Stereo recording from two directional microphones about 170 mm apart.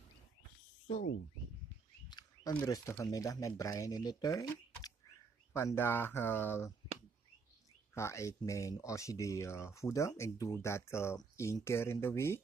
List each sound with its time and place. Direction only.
2.0 s a sound: 25° left (ahead or behind)
2.5 s speech: 20° left (ahead or behind)
7.9 s speech: 15° left (ahead or behind)